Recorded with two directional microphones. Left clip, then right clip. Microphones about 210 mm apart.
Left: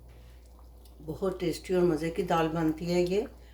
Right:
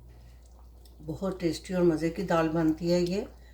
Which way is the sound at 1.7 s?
30° left (ahead or behind).